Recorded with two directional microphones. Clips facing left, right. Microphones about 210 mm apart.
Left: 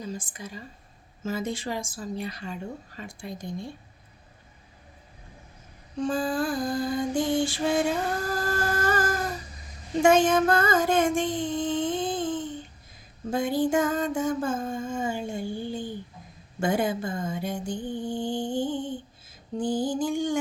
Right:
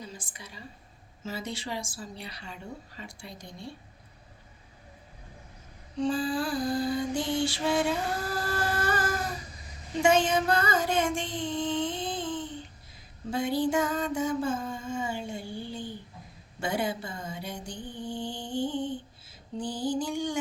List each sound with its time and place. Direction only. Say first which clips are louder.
0.0 s a woman's voice: left 8 dB; 45° left (ahead or behind)
6.0 s a woman's voice: left 2 dB; 45° left (ahead or behind)
8.3 s a sound: left 3 dB; 45° left (ahead or behind)
16.6 s a woman's voice: left 5 dB; 45° left (ahead or behind)